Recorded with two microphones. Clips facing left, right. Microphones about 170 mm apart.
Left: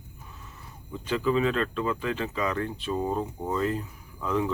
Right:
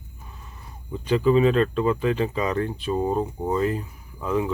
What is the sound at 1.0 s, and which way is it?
Speech, 20° right (ahead or behind).